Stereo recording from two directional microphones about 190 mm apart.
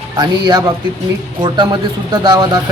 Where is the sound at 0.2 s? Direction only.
20° right (ahead or behind).